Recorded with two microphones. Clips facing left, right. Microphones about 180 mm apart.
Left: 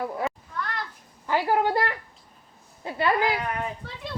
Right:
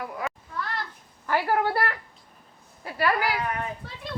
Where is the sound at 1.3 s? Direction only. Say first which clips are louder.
Left 1 dB; 15° left (ahead or behind).